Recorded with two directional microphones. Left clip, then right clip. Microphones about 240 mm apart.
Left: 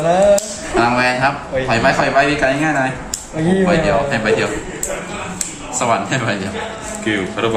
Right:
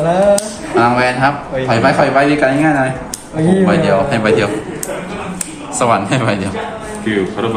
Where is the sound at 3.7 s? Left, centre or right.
Right.